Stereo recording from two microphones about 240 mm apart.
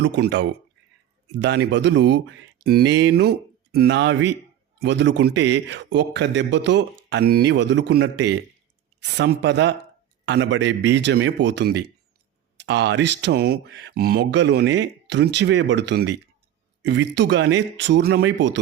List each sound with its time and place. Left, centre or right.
0.0 s speech: right